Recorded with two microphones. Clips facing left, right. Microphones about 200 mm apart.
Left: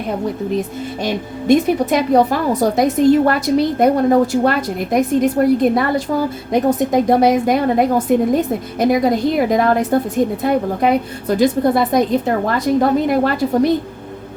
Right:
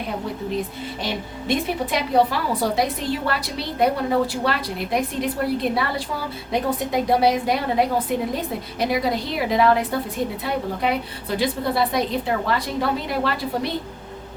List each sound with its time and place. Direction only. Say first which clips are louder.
1.0 s a woman's voice: left 10 dB; 45° left (ahead or behind)